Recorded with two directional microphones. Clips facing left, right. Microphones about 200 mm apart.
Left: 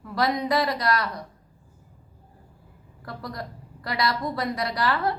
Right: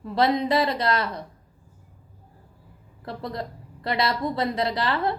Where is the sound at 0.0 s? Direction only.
25° right (ahead or behind).